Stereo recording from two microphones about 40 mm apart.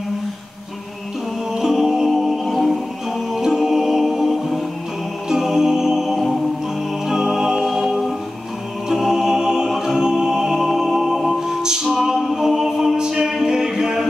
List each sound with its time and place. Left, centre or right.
1.5 s music: centre
3.3 s music: centre
5.3 s music: centre
7.6 s music: centre
8.8 s choir: centre
9.8 s a capella: centre
11.4 s music: centre
12.0 s a capella: centre